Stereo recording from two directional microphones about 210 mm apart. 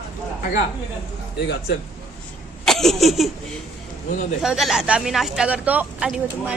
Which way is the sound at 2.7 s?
Centre (ahead or behind).